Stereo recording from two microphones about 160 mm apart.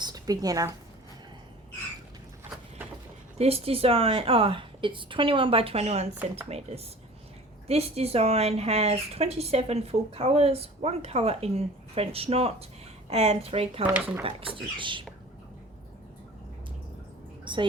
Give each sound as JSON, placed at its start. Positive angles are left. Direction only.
{"t": 0.0, "sound": "a woman's voice", "side_deg": -25}
{"t": 3.3, "sound": "speech", "side_deg": -40}
{"t": 17.4, "sound": "a sound", "side_deg": -30}